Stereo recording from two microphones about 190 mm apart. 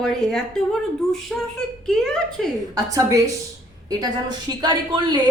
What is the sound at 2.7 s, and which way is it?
A man's voice, 15° right (ahead or behind).